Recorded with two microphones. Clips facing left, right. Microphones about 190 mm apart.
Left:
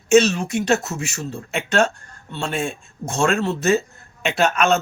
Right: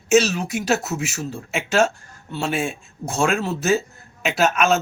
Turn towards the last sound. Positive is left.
turn(degrees=0)  # may be behind; listen again after turning